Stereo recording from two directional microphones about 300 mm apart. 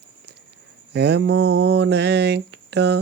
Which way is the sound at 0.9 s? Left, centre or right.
Right.